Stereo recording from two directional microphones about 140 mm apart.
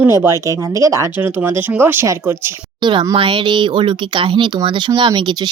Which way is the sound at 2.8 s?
35° right (ahead or behind).